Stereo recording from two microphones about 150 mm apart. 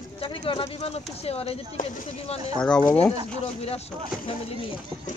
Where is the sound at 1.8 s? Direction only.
60° left (ahead or behind).